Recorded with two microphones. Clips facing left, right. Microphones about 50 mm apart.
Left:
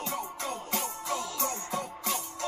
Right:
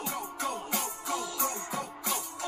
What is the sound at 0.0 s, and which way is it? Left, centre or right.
Music, centre.